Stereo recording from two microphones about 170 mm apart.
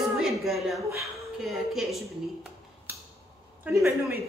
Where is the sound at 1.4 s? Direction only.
Centre (ahead or behind).